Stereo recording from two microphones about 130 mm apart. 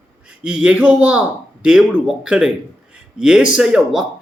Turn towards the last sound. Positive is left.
turn(degrees=-5)  # may be behind; listen again after turning